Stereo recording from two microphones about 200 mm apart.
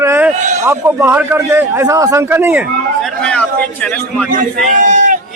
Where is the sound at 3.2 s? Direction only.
5° left (ahead or behind).